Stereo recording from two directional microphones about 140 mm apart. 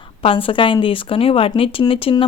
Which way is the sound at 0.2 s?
40° left (ahead or behind).